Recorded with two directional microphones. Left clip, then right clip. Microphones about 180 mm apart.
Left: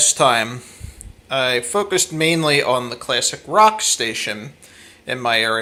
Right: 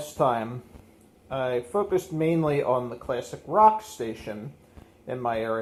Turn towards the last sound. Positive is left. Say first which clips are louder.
# left 10 dB
turn(degrees=15)  # may be behind; listen again after turning